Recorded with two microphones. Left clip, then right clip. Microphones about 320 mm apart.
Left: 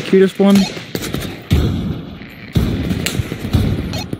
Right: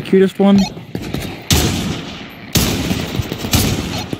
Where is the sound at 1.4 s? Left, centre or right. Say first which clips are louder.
Right 7 dB; right.